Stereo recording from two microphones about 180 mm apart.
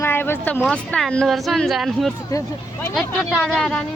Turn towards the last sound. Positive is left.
turn(degrees=5)  # may be behind; listen again after turning